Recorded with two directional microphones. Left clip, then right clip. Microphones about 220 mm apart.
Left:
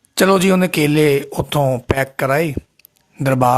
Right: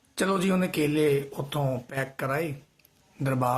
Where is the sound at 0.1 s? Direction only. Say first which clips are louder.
Left 13 dB; 50° left (ahead or behind).